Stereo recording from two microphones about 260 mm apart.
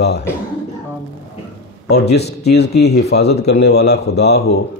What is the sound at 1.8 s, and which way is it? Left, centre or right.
Speech, left.